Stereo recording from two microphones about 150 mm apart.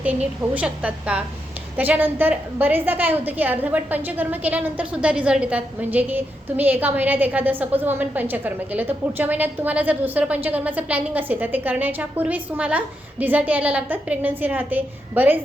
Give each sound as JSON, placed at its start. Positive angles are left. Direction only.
{"t": 0.0, "sound": "a woman's voice", "side_deg": -10}